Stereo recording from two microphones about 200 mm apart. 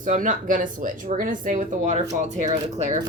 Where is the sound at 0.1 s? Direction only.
40° right (ahead or behind).